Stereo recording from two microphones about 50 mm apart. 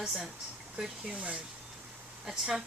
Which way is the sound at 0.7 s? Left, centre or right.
Centre.